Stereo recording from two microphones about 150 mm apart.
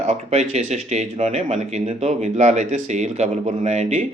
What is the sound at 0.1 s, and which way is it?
A man's voice, 45° right (ahead or behind).